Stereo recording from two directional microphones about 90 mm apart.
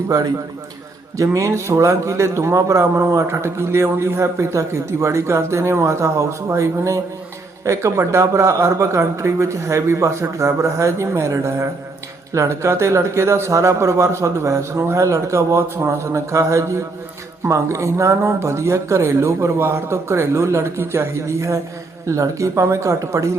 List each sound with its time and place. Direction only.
1.1 s a man's voice: 35° right (ahead or behind)